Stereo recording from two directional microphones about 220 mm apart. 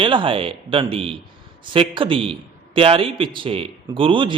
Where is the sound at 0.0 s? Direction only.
20° right (ahead or behind).